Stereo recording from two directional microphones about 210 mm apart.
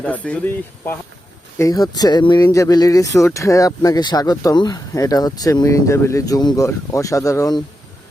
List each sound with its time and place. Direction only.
0.0 s speech: 5° left (ahead or behind)